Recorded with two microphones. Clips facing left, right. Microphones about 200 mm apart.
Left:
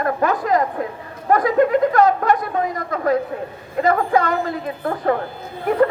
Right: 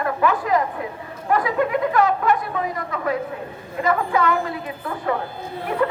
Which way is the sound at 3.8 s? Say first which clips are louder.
Left 3 dB; 40° left (ahead or behind).